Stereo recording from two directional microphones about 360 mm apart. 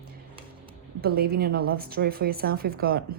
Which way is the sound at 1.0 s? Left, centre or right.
Right.